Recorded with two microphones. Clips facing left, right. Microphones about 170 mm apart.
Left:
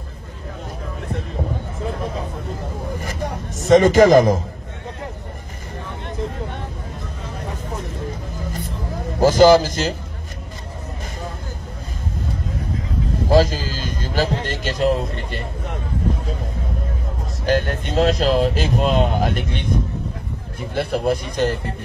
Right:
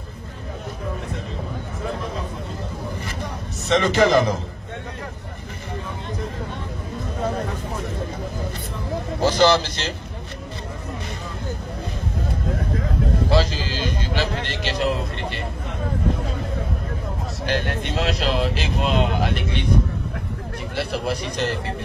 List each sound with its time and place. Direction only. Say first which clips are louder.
3.6 s speech: left 7 dB; 45° left (ahead or behind)
9.2 s speech: left 6 dB; 45° left (ahead or behind)
13.3 s speech: left 9 dB; 45° left (ahead or behind)
17.5 s speech: left 5 dB; 45° left (ahead or behind)
20.7 s speech: left 6 dB; 50° left (ahead or behind)